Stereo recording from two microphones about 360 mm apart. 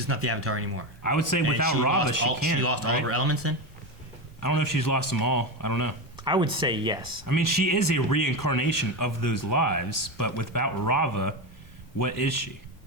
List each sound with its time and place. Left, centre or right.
0.0 s speech: right
1.0 s speech: left
2.6 s speech: right
4.4 s speech: left
6.1 s speech: centre
7.3 s speech: left